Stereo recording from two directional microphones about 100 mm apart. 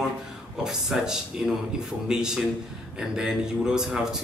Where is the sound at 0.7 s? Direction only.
5° right (ahead or behind).